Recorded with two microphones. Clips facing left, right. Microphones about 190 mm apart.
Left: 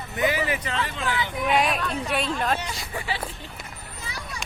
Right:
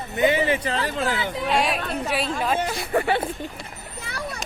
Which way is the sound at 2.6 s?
55° right (ahead or behind).